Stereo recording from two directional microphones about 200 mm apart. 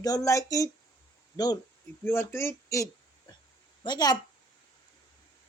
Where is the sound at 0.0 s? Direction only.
20° left (ahead or behind).